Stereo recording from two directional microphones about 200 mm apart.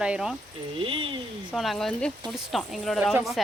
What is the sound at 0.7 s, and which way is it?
Speech, 25° right (ahead or behind).